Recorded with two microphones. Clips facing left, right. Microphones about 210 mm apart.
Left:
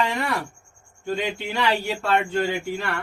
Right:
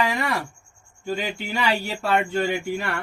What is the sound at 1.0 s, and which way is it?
Speech, 5° right (ahead or behind).